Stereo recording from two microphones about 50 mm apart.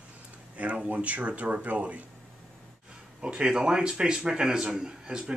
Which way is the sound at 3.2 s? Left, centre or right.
Centre.